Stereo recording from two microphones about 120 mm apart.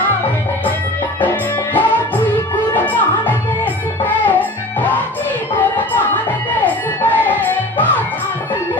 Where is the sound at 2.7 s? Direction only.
15° left (ahead or behind).